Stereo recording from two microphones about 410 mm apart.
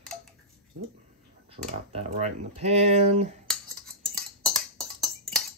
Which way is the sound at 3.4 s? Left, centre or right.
Centre.